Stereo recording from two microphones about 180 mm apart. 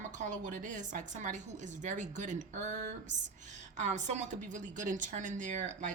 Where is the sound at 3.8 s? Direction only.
40° right (ahead or behind).